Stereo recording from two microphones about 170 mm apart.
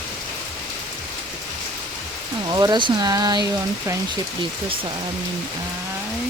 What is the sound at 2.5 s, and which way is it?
Speech, 25° right (ahead or behind).